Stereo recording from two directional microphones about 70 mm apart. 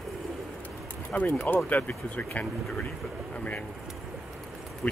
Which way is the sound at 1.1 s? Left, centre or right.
Left.